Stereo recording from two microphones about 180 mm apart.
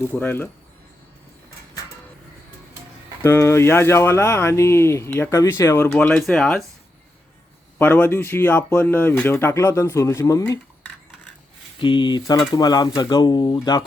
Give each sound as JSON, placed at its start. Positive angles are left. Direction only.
{"t": 0.1, "sound": "speech", "side_deg": 10}
{"t": 3.2, "sound": "speech", "side_deg": 15}
{"t": 7.8, "sound": "speech", "side_deg": 10}
{"t": 11.8, "sound": "speech", "side_deg": 25}